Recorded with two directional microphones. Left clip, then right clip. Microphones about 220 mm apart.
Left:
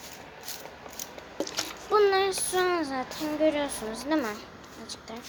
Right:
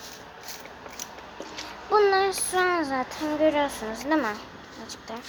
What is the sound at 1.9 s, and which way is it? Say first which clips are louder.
Child singing: right 2 dB; 10° left (ahead or behind).